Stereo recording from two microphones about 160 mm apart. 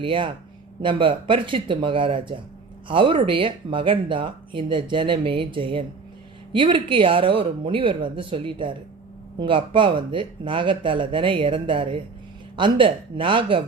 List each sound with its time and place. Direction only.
0.0 s speech: 30° right (ahead or behind)